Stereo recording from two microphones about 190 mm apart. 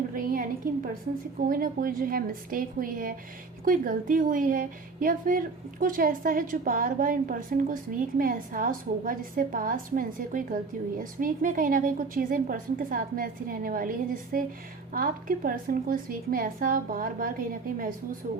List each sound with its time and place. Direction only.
0.1 s a woman's voice: 45° right (ahead or behind)